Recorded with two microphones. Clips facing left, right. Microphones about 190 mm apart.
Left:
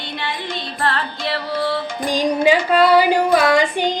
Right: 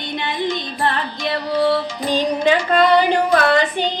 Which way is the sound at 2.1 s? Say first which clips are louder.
Left 1 dB; 10° left (ahead or behind).